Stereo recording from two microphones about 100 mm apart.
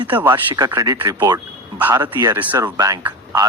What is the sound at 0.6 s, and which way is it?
A man's voice, 40° right (ahead or behind).